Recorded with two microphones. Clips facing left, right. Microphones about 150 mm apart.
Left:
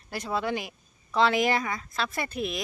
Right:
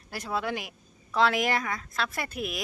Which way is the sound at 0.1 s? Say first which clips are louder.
Left 2 dB; centre (ahead or behind).